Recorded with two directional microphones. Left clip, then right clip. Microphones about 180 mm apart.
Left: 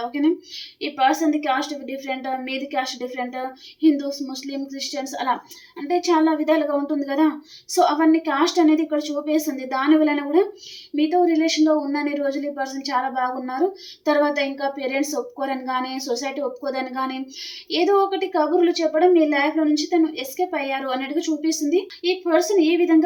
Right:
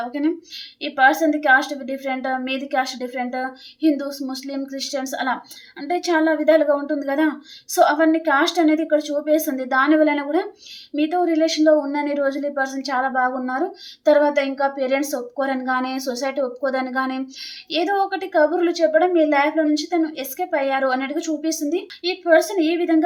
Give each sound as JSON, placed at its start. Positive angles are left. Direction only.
{"t": 0.1, "sound": "a woman's voice", "side_deg": -35}